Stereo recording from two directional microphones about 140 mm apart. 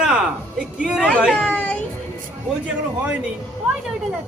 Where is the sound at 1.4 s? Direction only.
10° left (ahead or behind).